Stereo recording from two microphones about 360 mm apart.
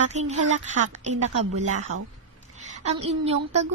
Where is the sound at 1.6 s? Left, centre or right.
Centre.